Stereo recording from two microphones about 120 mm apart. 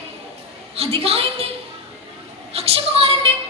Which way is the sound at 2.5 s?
55° right (ahead or behind).